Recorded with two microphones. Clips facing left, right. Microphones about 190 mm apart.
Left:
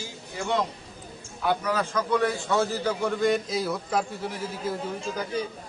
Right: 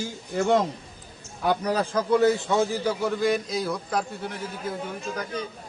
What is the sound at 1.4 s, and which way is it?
A man's voice, 40° right (ahead or behind).